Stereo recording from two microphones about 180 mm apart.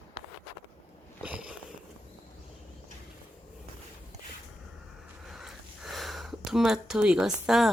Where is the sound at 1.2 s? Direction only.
5° right (ahead or behind).